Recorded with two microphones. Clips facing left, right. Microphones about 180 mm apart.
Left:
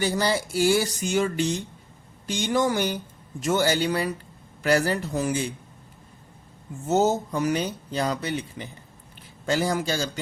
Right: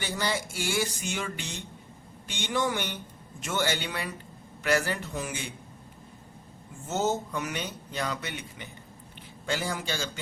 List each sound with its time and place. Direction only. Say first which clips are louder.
0.0 s speech: left 7 dB; 35° left (ahead or behind)
6.8 s speech: left 7 dB; 40° left (ahead or behind)